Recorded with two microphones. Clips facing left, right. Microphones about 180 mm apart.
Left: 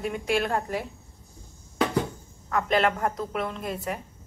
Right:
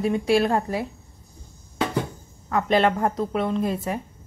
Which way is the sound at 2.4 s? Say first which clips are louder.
Right 4 dB; 30° right (ahead or behind).